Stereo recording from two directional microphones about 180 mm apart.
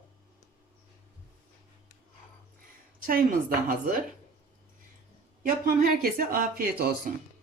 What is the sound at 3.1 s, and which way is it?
Speech, 50° right (ahead or behind).